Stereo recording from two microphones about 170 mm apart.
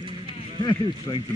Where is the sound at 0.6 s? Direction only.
25° left (ahead or behind).